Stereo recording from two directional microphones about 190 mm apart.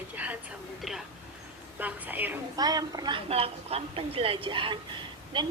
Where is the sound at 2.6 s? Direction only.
20° right (ahead or behind).